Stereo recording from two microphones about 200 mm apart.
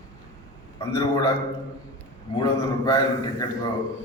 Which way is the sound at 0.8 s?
15° left (ahead or behind).